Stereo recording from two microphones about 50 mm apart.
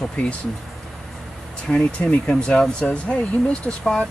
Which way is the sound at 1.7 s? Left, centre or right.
Left.